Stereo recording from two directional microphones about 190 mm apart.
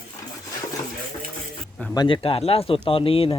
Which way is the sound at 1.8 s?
20° left (ahead or behind).